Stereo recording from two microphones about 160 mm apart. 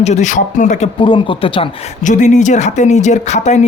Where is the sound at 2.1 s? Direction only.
50° left (ahead or behind).